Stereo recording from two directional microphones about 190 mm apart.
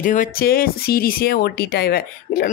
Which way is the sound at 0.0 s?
45° left (ahead or behind).